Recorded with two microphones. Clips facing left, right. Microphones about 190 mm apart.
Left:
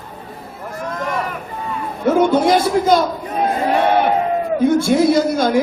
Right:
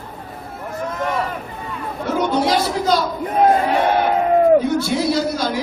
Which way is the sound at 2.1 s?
50° left (ahead or behind).